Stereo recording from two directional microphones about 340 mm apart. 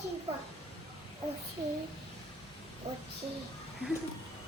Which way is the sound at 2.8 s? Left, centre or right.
Centre.